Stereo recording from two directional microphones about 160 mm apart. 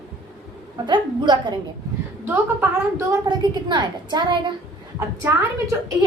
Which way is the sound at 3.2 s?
25° right (ahead or behind).